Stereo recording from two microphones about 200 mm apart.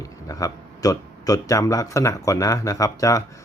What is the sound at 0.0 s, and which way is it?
Speech, 15° left (ahead or behind).